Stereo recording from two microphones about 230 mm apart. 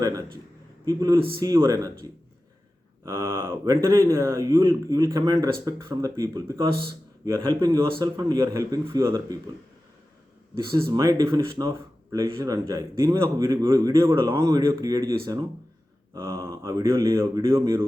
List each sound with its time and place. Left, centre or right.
0.0 s a man's voice: centre
10.9 s a man's voice: centre
16.1 s a man's voice: centre